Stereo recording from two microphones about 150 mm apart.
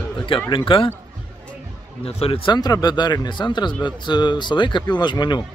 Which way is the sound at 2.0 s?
40° left (ahead or behind).